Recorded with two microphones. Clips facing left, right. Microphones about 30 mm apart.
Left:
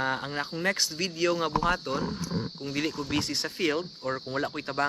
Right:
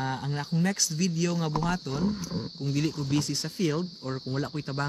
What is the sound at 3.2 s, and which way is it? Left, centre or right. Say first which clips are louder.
Speech: left 2 dB; left.